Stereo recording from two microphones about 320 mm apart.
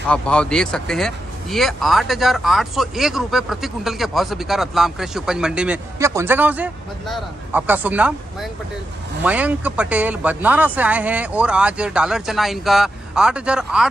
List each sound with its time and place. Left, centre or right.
0.1 s speech: centre